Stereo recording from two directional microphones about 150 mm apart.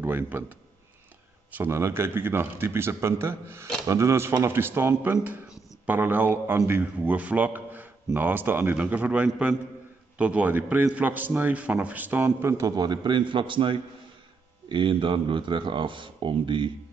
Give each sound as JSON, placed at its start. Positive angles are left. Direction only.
{"t": 0.0, "sound": "a man's voice", "side_deg": -10}
{"t": 1.5, "sound": "a man's voice", "side_deg": -15}